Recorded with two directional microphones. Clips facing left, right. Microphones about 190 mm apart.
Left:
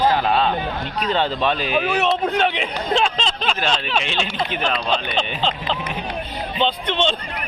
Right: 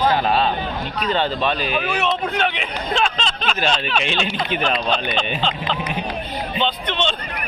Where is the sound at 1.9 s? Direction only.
35° left (ahead or behind).